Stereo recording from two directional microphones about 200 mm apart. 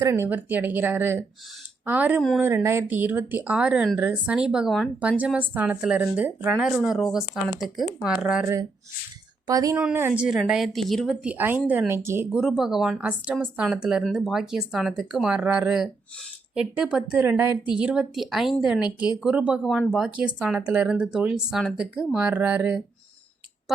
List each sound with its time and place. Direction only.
0.0 s speech: 15° right (ahead or behind)
9.5 s speech: 20° right (ahead or behind)